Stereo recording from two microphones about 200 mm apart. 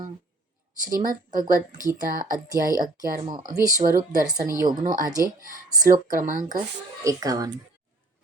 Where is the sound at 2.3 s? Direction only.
20° right (ahead or behind).